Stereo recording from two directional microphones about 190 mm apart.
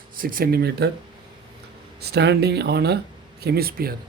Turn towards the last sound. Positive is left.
turn(degrees=-55)  # may be behind; listen again after turning